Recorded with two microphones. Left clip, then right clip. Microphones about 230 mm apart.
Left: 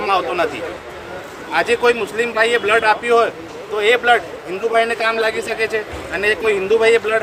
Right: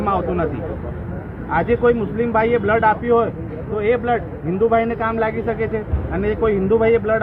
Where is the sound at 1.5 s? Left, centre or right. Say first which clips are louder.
Left 1 dB; left.